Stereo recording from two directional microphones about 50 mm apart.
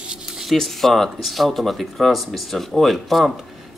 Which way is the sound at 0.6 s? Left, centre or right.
Centre.